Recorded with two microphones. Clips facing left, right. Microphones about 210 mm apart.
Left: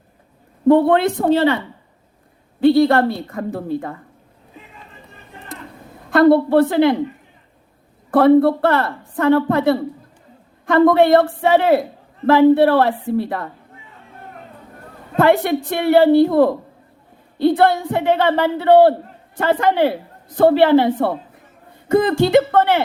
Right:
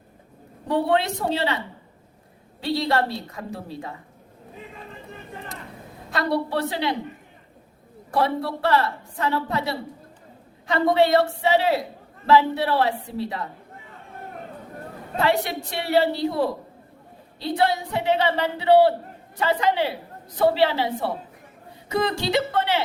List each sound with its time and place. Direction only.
0.7 s a woman's voice: 55° left (ahead or behind)
6.1 s a woman's voice: 55° left (ahead or behind)
8.1 s a woman's voice: 55° left (ahead or behind)
15.1 s a woman's voice: 55° left (ahead or behind)